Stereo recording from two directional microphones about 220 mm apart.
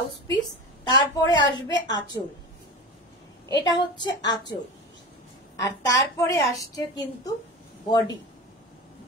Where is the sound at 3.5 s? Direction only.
55° left (ahead or behind).